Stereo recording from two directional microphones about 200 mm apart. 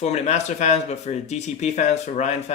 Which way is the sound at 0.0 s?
35° left (ahead or behind).